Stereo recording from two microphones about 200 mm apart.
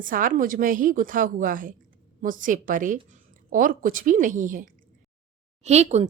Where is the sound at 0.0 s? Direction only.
40° right (ahead or behind).